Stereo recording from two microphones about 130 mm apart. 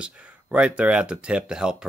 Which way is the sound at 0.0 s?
10° right (ahead or behind).